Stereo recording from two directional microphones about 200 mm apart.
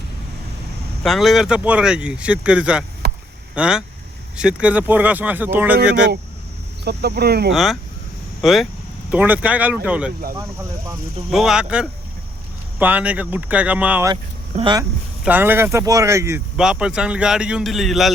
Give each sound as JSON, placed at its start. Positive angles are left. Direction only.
{"t": 1.0, "sound": "speech", "side_deg": 0}
{"t": 3.0, "sound": "a sound", "side_deg": -55}
{"t": 3.5, "sound": "speech", "side_deg": -5}
{"t": 6.8, "sound": "speech", "side_deg": -55}
{"t": 7.5, "sound": "speech", "side_deg": 0}
{"t": 11.3, "sound": "speech", "side_deg": 0}
{"t": 14.5, "sound": "speech", "side_deg": -25}
{"t": 15.2, "sound": "speech", "side_deg": -10}